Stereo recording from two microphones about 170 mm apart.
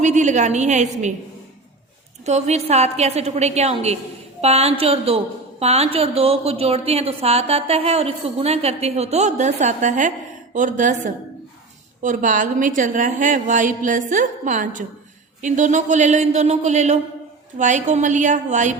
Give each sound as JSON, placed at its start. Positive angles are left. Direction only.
{"t": 0.0, "sound": "a woman's voice", "side_deg": -45}
{"t": 2.2, "sound": "a woman's voice", "side_deg": -40}